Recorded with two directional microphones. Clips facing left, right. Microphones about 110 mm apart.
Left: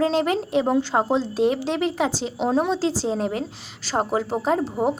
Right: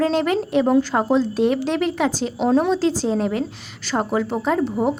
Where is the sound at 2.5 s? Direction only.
5° left (ahead or behind).